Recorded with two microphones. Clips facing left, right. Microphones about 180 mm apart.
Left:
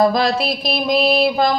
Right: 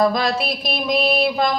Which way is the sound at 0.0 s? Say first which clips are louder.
Left 3 dB; 35° left (ahead or behind).